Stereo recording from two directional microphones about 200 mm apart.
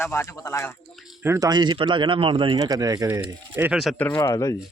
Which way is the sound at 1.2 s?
15° right (ahead or behind).